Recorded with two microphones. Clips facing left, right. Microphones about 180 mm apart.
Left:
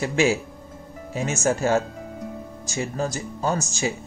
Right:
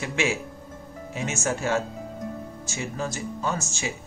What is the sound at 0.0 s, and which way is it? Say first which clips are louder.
Speech: left 6 dB; 40° left (ahead or behind).